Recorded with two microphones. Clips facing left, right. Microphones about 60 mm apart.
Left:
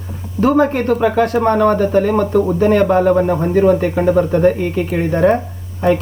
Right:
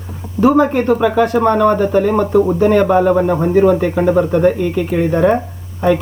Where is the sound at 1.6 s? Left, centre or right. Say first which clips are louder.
Right 1 dB; centre.